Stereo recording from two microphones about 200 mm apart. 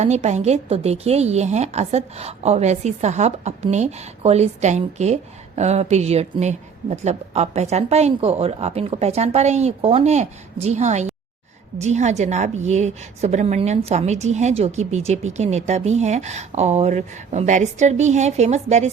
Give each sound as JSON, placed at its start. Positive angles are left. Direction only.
{"t": 0.0, "sound": "a woman's voice", "side_deg": -35}